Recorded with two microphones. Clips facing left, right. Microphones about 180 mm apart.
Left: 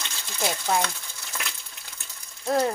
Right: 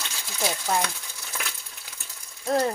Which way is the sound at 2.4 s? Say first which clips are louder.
Even; centre (ahead or behind).